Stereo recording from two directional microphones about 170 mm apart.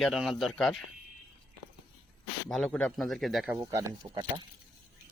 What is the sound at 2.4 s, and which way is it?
Speech, centre (ahead or behind).